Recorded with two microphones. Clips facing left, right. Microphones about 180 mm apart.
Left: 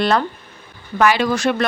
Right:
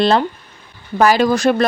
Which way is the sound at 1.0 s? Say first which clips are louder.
Right 3 dB; 40° right (ahead or behind).